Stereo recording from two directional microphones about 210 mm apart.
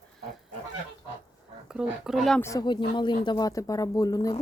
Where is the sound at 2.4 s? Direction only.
15° left (ahead or behind).